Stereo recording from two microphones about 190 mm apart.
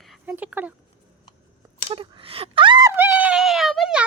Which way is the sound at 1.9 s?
30° right (ahead or behind).